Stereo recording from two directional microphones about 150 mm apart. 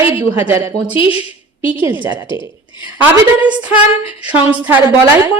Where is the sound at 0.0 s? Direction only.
15° right (ahead or behind).